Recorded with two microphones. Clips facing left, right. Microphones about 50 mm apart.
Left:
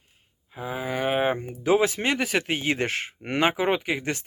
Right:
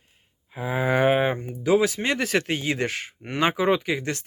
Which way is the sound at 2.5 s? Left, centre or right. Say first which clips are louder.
Even; left.